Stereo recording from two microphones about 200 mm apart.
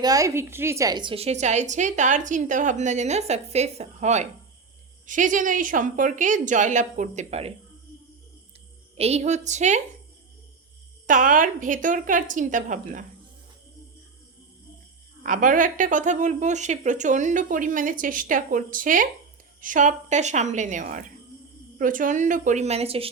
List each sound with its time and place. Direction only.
0.0 s a woman's voice: 15° right (ahead or behind)
9.0 s a woman's voice: 30° right (ahead or behind)
11.0 s a woman's voice: 40° right (ahead or behind)
15.2 s a woman's voice: 40° right (ahead or behind)